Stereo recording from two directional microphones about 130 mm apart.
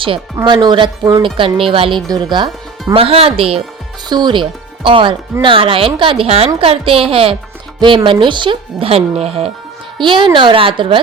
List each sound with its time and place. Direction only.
0.4 s a woman's voice: 35° right (ahead or behind)
2.0 s speech: 35° right (ahead or behind)
2.9 s a woman's voice: 45° right (ahead or behind)
10.0 s speech: 40° right (ahead or behind)